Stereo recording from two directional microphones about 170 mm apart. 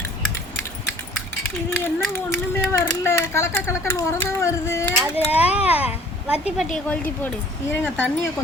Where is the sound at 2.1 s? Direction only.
15° left (ahead or behind).